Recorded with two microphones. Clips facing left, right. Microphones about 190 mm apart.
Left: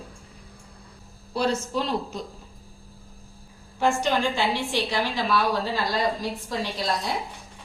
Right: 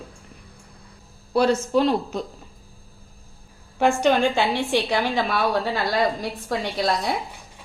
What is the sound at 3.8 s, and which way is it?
A woman's voice, 55° right (ahead or behind).